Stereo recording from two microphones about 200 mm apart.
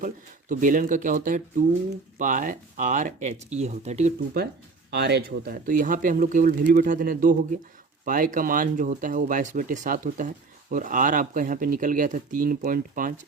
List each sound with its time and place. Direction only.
0.0 s speech: 40° right (ahead or behind)
4.9 s speech: 55° right (ahead or behind)